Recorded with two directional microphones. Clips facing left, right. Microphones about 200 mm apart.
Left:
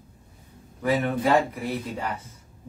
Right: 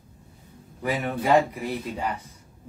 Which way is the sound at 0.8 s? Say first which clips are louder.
Left 2 dB; 15° right (ahead or behind).